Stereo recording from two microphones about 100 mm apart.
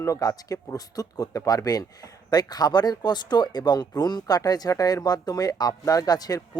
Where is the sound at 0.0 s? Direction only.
35° left (ahead or behind).